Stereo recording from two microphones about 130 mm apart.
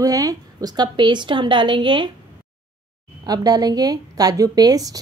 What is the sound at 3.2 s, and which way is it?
Speech, 30° right (ahead or behind).